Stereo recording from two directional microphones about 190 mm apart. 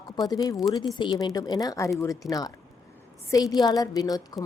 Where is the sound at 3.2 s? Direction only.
20° left (ahead or behind).